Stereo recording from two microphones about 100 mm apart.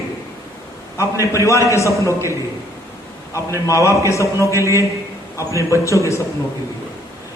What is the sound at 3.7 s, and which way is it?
A man's voice, 35° left (ahead or behind).